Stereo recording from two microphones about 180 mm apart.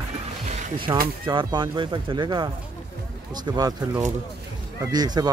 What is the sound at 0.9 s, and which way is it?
Speech, 25° right (ahead or behind).